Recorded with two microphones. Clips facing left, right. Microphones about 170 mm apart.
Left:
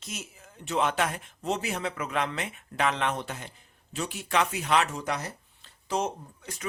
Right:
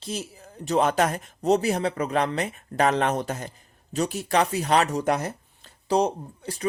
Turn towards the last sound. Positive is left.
turn(degrees=-35)  # may be behind; listen again after turning